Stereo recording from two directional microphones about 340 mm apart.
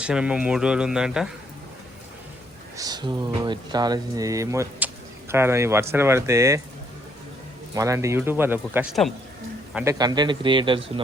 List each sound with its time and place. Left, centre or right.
0.0 s speech: centre
2.7 s speech: centre
7.7 s speech: centre